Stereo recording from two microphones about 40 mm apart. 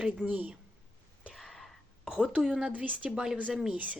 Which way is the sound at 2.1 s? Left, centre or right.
Centre.